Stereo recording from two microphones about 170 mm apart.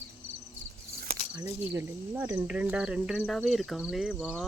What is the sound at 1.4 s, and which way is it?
Speech, 15° right (ahead or behind).